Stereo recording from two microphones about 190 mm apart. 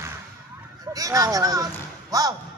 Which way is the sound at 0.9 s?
20° right (ahead or behind).